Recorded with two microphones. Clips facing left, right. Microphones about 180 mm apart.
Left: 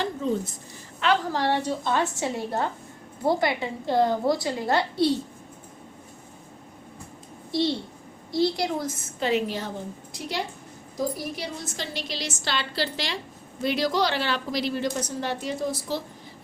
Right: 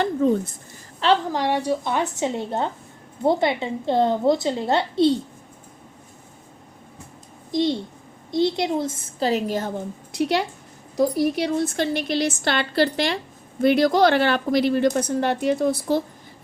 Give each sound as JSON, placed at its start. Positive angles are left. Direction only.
{"t": 0.0, "sound": "a woman's voice", "side_deg": -55}
{"t": 1.3, "sound": "a woman's voice", "side_deg": -15}
{"t": 7.5, "sound": "a child's voice", "side_deg": -15}
{"t": 10.1, "sound": "a woman's voice", "side_deg": -70}